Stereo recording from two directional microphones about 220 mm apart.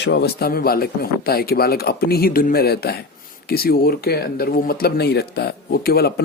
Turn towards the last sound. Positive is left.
turn(degrees=45)  # may be behind; listen again after turning